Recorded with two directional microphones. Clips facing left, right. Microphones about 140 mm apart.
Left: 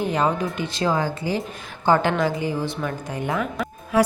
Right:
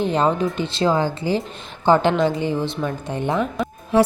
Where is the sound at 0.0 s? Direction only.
30° right (ahead or behind).